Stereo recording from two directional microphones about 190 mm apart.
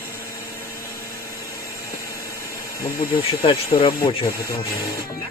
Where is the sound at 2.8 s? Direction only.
30° left (ahead or behind).